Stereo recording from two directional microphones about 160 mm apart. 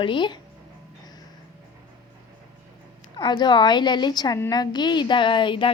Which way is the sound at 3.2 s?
25° left (ahead or behind).